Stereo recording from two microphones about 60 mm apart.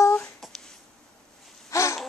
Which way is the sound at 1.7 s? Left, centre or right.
Left.